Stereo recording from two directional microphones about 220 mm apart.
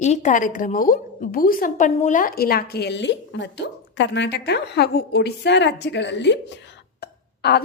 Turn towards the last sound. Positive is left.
turn(degrees=50)  # may be behind; listen again after turning